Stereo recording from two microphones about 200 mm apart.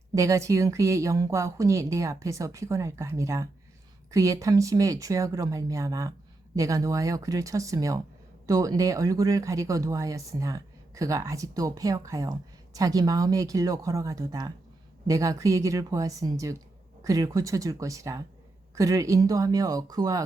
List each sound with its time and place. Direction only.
0.1 s speech: 15° right (ahead or behind)